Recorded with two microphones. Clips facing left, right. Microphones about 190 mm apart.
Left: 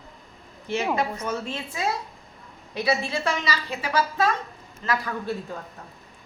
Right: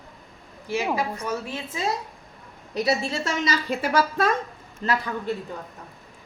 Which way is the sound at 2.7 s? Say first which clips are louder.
Right 1 dB; 40° right (ahead or behind).